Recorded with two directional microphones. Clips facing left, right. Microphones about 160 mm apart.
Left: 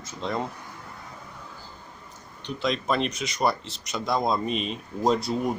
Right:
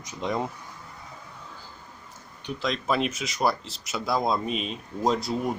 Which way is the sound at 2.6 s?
Centre (ahead or behind).